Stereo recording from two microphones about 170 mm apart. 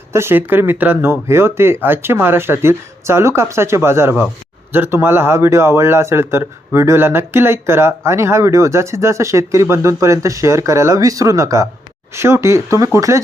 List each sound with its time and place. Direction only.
0.1 s speech: 15° right (ahead or behind)